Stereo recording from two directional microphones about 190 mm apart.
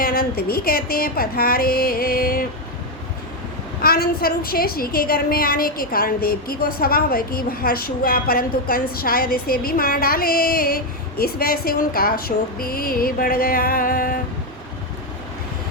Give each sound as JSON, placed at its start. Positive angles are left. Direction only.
{"t": 0.0, "sound": "a woman's voice", "side_deg": 50}
{"t": 3.8, "sound": "a woman's voice", "side_deg": 50}